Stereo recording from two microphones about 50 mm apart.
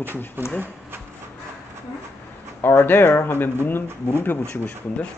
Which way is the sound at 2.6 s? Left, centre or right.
Left.